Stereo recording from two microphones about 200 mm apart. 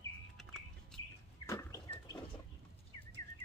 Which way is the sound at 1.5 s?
15° left (ahead or behind).